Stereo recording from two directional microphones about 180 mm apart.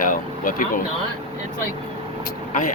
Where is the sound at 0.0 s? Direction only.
50° left (ahead or behind).